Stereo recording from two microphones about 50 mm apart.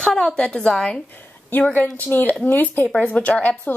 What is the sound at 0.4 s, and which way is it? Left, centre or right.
Speech, centre.